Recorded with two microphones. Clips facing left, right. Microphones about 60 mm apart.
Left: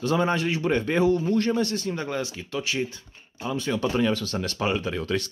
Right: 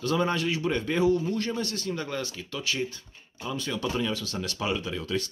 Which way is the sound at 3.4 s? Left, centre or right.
Left.